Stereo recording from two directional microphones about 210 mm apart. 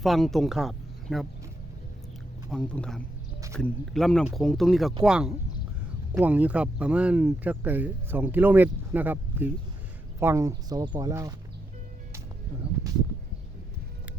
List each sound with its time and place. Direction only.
0.0 s speech: centre (ahead or behind)
2.5 s speech: 5° left (ahead or behind); by 11.3 s 15° right (ahead or behind)